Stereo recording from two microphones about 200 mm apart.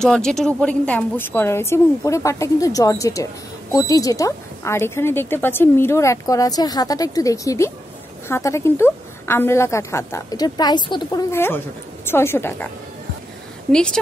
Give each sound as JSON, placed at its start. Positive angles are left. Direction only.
{"t": 0.0, "sound": "speech", "side_deg": 5}
{"t": 13.7, "sound": "a woman's voice", "side_deg": 5}